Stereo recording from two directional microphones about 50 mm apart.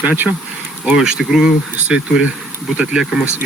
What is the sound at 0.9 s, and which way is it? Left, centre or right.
Speech, centre.